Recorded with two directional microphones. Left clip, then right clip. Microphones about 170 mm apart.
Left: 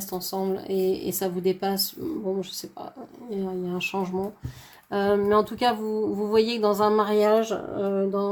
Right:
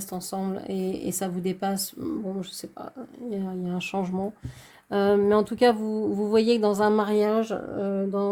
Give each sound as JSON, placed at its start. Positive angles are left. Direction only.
{"t": 0.1, "sound": "speech", "side_deg": -45}
{"t": 3.2, "sound": "speech", "side_deg": -40}